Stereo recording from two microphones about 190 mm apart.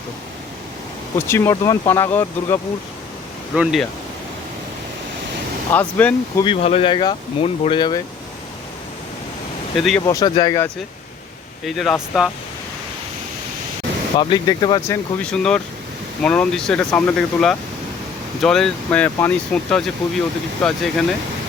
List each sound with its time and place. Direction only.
1.3 s speech: 15° left (ahead or behind)
3.5 s speech: 5° right (ahead or behind)
5.7 s speech: 10° left (ahead or behind)
6.4 s speech: 30° left (ahead or behind)
9.7 s speech: centre (ahead or behind)
10.1 s speech: 20° left (ahead or behind)
11.6 s speech: centre (ahead or behind)
14.2 s speech: 20° left (ahead or behind)
15.2 s speech: 5° left (ahead or behind)